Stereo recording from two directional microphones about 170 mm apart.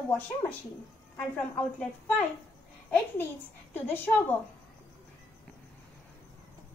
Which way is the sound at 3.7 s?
10° left (ahead or behind).